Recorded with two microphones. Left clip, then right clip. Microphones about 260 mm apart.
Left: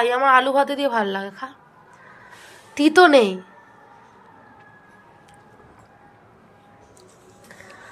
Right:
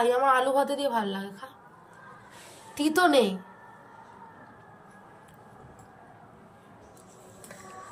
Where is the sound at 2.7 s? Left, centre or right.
Centre.